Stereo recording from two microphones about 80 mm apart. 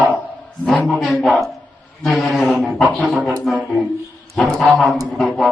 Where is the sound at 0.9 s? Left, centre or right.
Centre.